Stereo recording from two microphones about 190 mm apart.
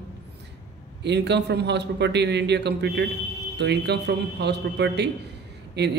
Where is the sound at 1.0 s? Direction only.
65° right (ahead or behind).